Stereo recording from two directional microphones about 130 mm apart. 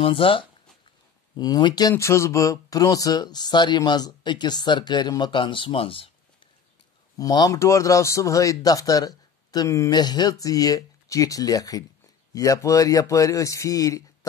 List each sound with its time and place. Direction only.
0.0 s speech: 45° left (ahead or behind)
7.2 s a man's voice: 30° left (ahead or behind)